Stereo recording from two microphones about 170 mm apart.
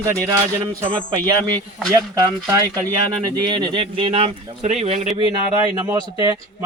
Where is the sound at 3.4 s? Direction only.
25° right (ahead or behind).